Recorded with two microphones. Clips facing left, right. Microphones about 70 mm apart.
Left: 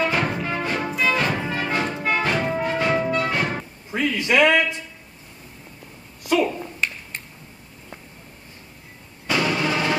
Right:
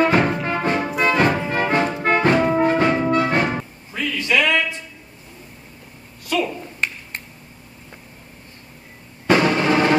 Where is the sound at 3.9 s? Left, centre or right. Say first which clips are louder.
Left 1 dB; left.